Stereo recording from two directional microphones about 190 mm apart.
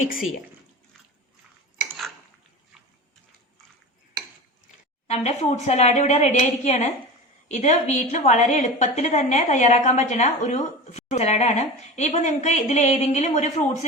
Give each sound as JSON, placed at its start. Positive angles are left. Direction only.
{"t": 5.0, "sound": "a woman's voice", "side_deg": 35}